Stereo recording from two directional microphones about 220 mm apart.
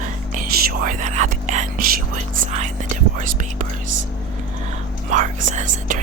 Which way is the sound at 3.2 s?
35° right (ahead or behind).